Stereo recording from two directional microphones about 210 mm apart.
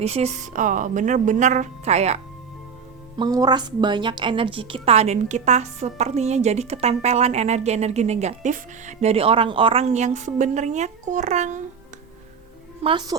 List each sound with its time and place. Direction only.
0.0 s a woman's voice: 30° right (ahead or behind)
3.2 s a woman's voice: 20° right (ahead or behind); by 11.6 s 35° right (ahead or behind)
12.8 s a woman's voice: 20° right (ahead or behind)